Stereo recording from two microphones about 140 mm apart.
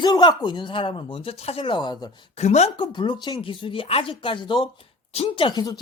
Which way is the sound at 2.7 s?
35° left (ahead or behind).